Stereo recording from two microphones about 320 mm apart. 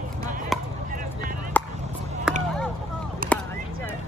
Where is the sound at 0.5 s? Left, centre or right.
Centre.